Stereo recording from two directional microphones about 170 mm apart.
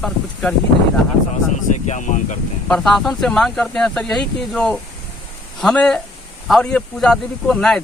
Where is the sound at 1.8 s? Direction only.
45° left (ahead or behind).